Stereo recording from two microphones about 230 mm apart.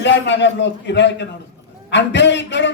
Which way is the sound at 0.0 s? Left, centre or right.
Left.